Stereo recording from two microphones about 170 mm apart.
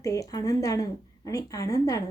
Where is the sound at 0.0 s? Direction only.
20° left (ahead or behind).